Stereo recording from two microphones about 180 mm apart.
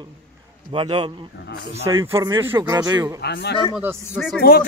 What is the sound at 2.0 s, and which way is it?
Speech, 15° right (ahead or behind).